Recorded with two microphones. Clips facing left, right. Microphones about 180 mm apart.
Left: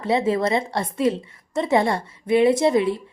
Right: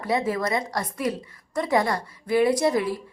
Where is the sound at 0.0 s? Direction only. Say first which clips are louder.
Left 4 dB; 25° left (ahead or behind).